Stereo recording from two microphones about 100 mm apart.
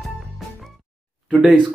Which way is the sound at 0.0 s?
Centre (ahead or behind).